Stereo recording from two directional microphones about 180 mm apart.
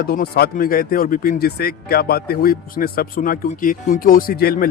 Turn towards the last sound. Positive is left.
turn(degrees=55)  # may be behind; listen again after turning